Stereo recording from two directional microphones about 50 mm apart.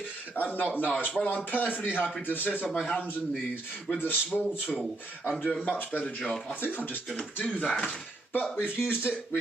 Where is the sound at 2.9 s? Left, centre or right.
Left.